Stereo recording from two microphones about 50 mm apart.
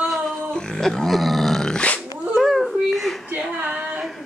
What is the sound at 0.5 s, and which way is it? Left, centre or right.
Grunt, centre.